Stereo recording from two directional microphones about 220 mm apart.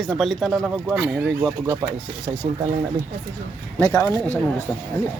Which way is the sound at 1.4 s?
15° right (ahead or behind).